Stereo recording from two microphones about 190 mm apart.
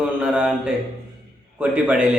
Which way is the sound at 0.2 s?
5° right (ahead or behind).